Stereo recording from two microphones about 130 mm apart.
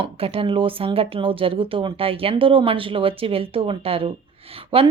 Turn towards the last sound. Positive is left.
turn(degrees=-45)  # may be behind; listen again after turning